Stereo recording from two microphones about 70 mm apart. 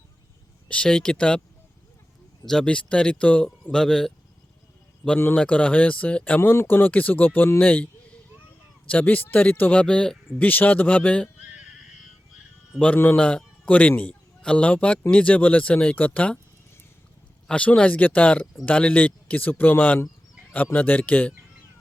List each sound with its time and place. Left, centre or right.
0.7 s speech: centre
2.5 s speech: centre
5.4 s speech: centre
6.4 s speech: left
8.9 s speech: left
9.8 s speech: centre
13.1 s a man's voice: centre
17.5 s speech: centre